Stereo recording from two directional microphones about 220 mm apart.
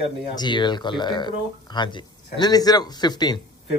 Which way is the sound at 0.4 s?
20° left (ahead or behind).